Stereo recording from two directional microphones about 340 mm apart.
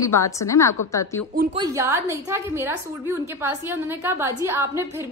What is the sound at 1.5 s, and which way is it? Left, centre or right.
A woman's voice, centre.